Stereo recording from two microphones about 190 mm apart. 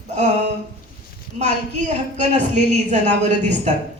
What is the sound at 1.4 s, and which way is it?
A woman's voice, 40° right (ahead or behind).